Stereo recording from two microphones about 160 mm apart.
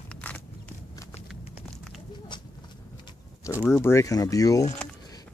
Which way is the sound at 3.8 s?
15° left (ahead or behind).